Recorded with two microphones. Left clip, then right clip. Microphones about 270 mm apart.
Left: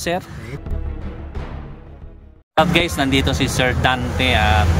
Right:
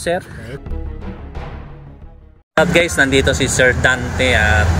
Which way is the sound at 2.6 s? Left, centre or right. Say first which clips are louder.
Right 5 dB; centre.